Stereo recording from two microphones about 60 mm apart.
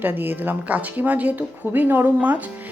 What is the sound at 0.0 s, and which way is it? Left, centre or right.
A woman's voice, right.